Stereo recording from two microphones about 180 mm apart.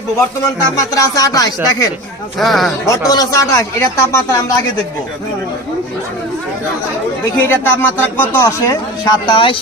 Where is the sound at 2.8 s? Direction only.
20° left (ahead or behind).